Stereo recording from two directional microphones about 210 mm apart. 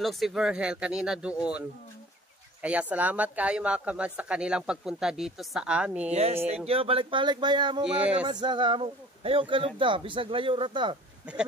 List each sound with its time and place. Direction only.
0.0 s speech: centre (ahead or behind)
2.6 s speech: 5° right (ahead or behind)
6.1 s speech: 30° right (ahead or behind)
7.8 s speech: 5° right (ahead or behind)
8.3 s speech: 20° right (ahead or behind)